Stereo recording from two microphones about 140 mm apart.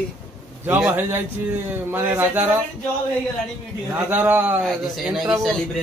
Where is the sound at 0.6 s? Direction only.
15° right (ahead or behind).